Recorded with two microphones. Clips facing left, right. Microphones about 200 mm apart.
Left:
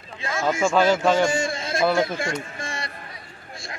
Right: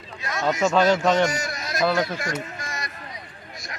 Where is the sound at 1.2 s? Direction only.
25° left (ahead or behind).